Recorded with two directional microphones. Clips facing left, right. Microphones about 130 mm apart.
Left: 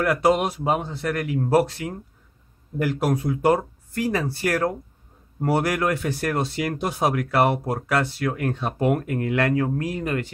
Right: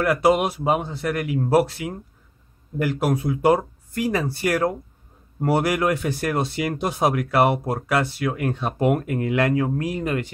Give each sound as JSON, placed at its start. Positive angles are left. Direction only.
{"t": 0.0, "sound": "speech", "side_deg": -5}